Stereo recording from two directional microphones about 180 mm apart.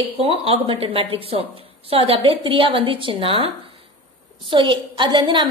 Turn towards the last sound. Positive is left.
turn(degrees=-25)  # may be behind; listen again after turning